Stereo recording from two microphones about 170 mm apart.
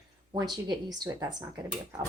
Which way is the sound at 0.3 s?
25° right (ahead or behind).